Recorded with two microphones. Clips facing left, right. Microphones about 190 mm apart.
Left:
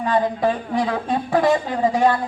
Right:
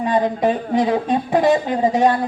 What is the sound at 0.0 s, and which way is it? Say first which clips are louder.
A man's voice: right 2 dB; 20° right (ahead or behind).